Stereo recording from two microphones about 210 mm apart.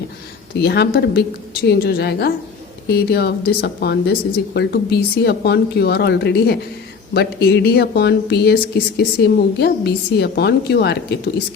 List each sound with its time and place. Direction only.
0.6 s speech: 50° left (ahead or behind)